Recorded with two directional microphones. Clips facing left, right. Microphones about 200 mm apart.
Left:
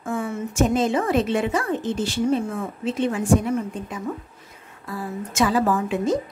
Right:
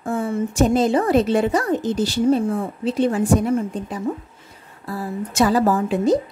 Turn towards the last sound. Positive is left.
turn(degrees=-35)  # may be behind; listen again after turning